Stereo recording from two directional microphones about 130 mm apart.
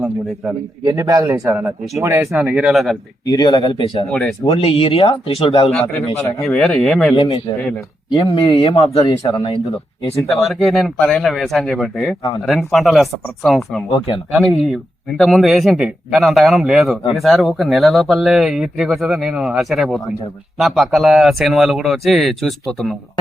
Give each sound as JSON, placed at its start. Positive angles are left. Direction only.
{"t": 0.9, "sound": "speech", "side_deg": -25}
{"t": 1.5, "sound": "speech", "side_deg": -15}
{"t": 3.2, "sound": "speech", "side_deg": 30}
{"t": 4.1, "sound": "speech", "side_deg": 5}
{"t": 4.4, "sound": "speech", "side_deg": 45}
{"t": 6.4, "sound": "speech", "side_deg": 5}
{"t": 7.2, "sound": "speech", "side_deg": 45}
{"t": 9.0, "sound": "speech", "side_deg": 35}
{"t": 10.2, "sound": "speech", "side_deg": 0}